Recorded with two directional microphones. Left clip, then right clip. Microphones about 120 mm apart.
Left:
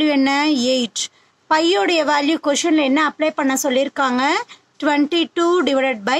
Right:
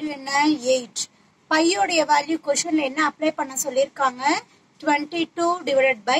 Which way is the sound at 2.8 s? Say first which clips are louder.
Left 5 dB; 45° left (ahead or behind).